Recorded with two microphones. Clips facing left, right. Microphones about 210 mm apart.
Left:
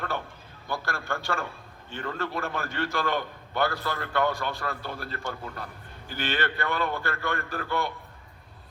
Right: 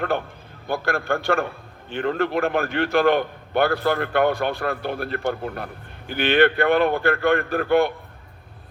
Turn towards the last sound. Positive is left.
turn(degrees=-60)  # may be behind; listen again after turning